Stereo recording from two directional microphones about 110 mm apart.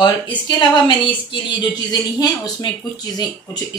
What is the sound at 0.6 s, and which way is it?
A woman's voice, 45° left (ahead or behind).